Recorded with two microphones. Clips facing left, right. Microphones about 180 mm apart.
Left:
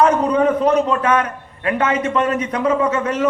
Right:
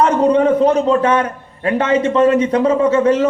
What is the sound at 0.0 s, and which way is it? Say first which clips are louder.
A man's voice: right 2 dB; 30° right (ahead or behind).